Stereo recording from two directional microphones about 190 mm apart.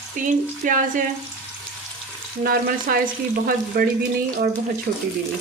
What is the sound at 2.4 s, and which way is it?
Speech, 50° right (ahead or behind).